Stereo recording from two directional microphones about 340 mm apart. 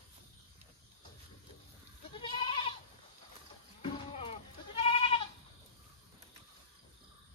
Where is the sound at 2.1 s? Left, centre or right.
Centre.